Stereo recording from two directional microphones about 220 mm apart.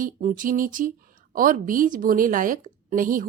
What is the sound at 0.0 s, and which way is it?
A woman's voice, 35° right (ahead or behind).